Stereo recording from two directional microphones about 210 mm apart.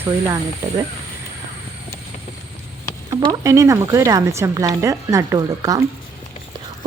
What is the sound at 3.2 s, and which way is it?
Speech, 15° right (ahead or behind).